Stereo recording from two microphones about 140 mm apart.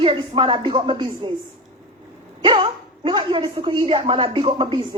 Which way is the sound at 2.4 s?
40° right (ahead or behind).